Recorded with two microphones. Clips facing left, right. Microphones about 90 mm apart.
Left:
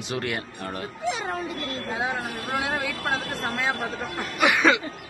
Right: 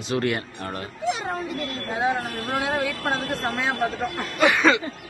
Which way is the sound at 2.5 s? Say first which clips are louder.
Right 3 dB; 15° left (ahead or behind).